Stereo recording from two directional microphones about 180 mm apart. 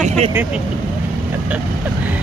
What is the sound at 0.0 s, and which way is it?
Vehicle, 40° right (ahead or behind).